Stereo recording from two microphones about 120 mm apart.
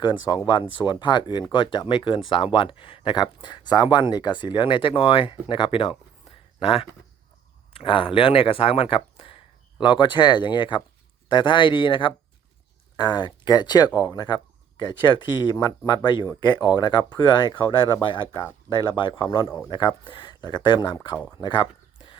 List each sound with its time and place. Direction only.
0.0 s speech: 40° left (ahead or behind)